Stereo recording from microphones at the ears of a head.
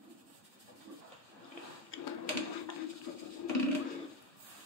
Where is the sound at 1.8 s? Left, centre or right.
Left.